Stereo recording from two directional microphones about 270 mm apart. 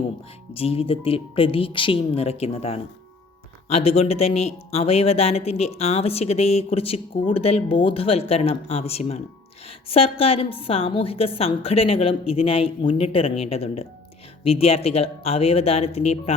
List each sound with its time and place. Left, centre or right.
0.5 s speech: left